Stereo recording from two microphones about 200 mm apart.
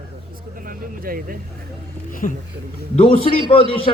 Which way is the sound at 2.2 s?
40° left (ahead or behind).